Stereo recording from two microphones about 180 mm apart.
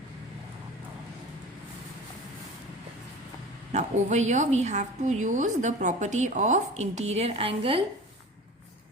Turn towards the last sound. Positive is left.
turn(degrees=-30)  # may be behind; listen again after turning